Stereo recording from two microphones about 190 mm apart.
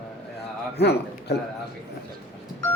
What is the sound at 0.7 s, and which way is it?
Speech, 60° left (ahead or behind).